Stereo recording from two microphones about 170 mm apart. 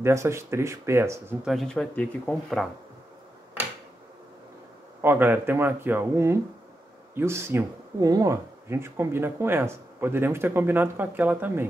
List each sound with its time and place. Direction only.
0.0 s speech: 15° right (ahead or behind)
1.4 s speech: centre (ahead or behind)
5.0 s speech: 10° right (ahead or behind)